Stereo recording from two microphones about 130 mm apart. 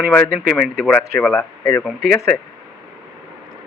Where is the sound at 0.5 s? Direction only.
Centre (ahead or behind).